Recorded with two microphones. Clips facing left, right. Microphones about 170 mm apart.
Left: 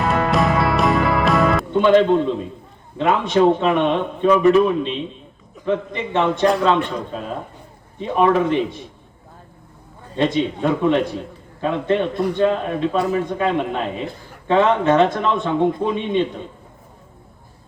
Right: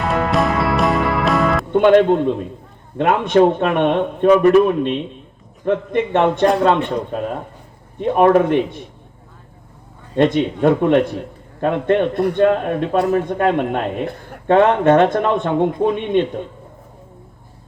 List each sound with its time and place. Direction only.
0.0 s music: centre (ahead or behind)
1.7 s a man's voice: 55° right (ahead or behind)
5.6 s a man's voice: 55° right (ahead or behind)
10.2 s a man's voice: 55° right (ahead or behind)